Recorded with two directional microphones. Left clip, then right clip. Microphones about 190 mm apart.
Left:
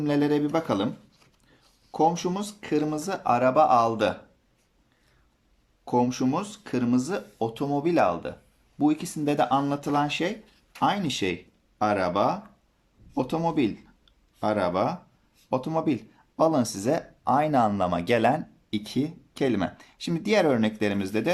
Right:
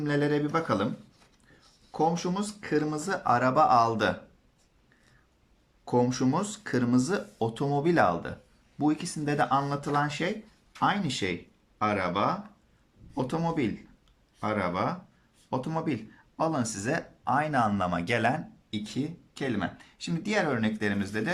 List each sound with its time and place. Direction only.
0.0 s speech: 20° left (ahead or behind)
1.9 s speech: 20° left (ahead or behind)
5.8 s speech: 15° left (ahead or behind)